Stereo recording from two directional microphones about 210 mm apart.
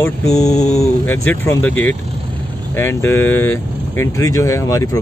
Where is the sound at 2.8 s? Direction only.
10° left (ahead or behind).